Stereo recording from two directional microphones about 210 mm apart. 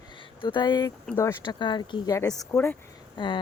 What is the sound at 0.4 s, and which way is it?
Speech, 20° left (ahead or behind).